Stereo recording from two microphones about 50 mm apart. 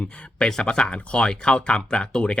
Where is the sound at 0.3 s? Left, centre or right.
Centre.